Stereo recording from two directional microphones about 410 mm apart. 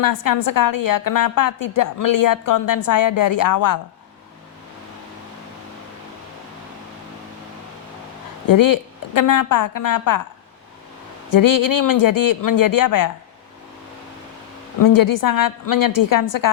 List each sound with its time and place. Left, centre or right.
0.0 s a woman's voice: left
8.4 s a woman's voice: left
11.3 s a woman's voice: left
14.8 s a woman's voice: left